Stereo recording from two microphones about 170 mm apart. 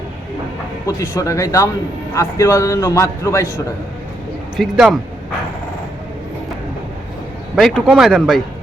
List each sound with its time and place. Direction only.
0.9 s a man's voice: 15° left (ahead or behind)
4.5 s speech: 5° right (ahead or behind)
7.9 s speech: centre (ahead or behind)